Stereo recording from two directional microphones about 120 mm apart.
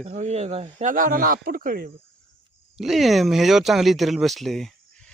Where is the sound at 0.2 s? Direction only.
75° right (ahead or behind).